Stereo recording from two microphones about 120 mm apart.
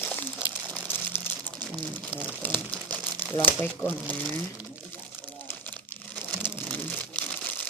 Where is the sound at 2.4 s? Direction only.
15° left (ahead or behind).